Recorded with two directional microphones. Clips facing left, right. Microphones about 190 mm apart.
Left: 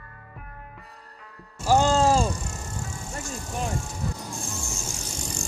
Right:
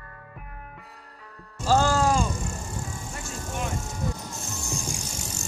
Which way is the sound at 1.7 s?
20° left (ahead or behind).